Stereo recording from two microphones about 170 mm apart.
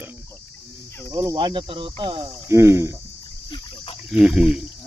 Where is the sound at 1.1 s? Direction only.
20° right (ahead or behind).